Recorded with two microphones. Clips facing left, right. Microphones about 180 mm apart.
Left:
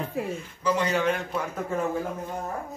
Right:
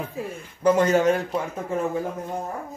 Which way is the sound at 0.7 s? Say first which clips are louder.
Right 6 dB; 45° right (ahead or behind).